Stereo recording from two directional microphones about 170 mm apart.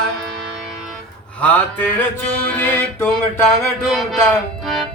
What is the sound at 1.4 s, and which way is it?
Music, 10° left (ahead or behind).